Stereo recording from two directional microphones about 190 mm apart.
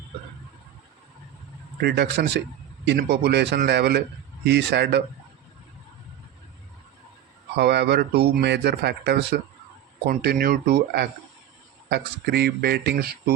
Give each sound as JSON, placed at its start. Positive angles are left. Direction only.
{"t": 1.8, "sound": "speech", "side_deg": -60}
{"t": 7.5, "sound": "speech", "side_deg": -60}